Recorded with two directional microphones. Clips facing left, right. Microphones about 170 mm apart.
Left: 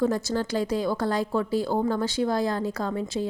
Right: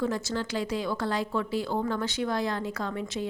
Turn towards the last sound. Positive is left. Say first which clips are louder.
# left 4 dB
turn(degrees=35)  # may be behind; listen again after turning